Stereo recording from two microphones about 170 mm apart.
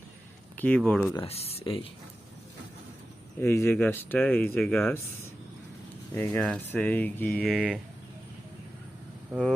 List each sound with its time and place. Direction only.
0.5 s speech: 10° left (ahead or behind)
1.2 s speech: 35° left (ahead or behind)
3.4 s speech: 15° left (ahead or behind)
6.1 s speech: 10° left (ahead or behind); by 7.8 s 5° right (ahead or behind)